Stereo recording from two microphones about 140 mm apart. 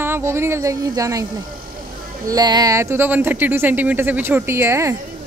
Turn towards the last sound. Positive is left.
turn(degrees=-20)  # may be behind; listen again after turning